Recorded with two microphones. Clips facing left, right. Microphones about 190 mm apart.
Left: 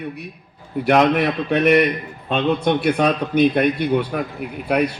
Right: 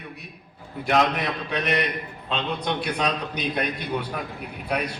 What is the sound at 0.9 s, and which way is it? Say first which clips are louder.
A man's voice: left 7 dB; 55° left (ahead or behind).